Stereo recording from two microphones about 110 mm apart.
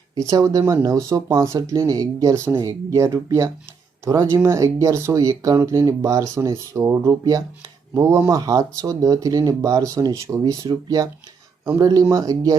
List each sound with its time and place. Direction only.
0.2 s speech: 30° right (ahead or behind)